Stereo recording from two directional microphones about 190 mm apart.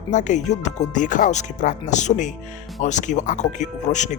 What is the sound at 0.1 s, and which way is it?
Speech, 40° left (ahead or behind).